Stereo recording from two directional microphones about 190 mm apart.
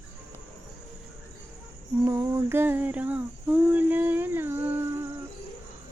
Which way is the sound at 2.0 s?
15° right (ahead or behind).